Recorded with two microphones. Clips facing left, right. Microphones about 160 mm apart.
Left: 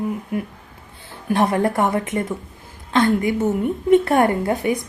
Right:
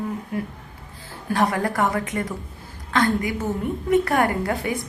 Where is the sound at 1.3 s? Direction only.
25° left (ahead or behind).